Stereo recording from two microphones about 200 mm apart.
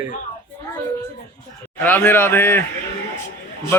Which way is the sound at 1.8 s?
10° left (ahead or behind).